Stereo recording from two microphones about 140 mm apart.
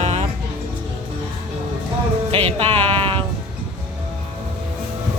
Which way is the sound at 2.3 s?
40° right (ahead or behind).